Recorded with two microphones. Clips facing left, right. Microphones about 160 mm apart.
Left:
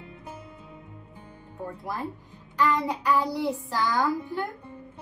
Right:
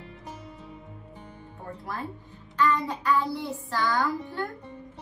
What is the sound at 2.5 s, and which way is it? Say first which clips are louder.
A woman's voice: left 1 dB; 15° left (ahead or behind).